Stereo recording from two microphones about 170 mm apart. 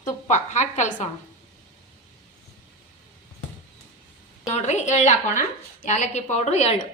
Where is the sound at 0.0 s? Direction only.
45° left (ahead or behind).